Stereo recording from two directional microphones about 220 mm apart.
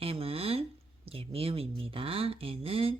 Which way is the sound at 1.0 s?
25° right (ahead or behind).